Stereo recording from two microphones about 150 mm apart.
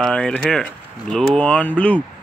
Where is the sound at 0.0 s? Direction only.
5° left (ahead or behind).